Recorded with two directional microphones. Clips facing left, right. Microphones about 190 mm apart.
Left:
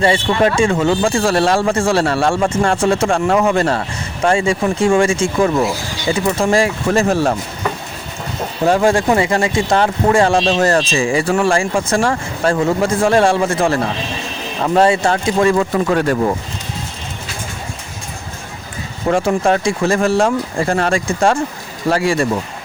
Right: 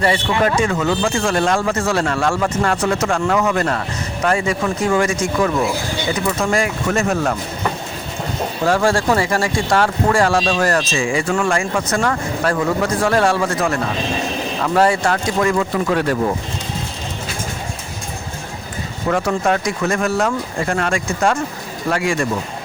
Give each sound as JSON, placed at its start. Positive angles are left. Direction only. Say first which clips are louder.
{"t": 0.0, "sound": "speech", "louder": "left 3 dB", "side_deg": 25}
{"t": 8.6, "sound": "speech", "louder": "left 3 dB", "side_deg": 20}
{"t": 11.0, "sound": "speech", "louder": "left 3 dB", "side_deg": 35}
{"t": 15.9, "sound": "speech", "louder": "left 1 dB", "side_deg": 45}
{"t": 19.0, "sound": "speech", "louder": "left 3 dB", "side_deg": 25}